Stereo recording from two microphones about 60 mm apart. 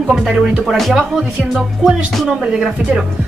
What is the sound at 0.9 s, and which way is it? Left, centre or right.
Speech, centre.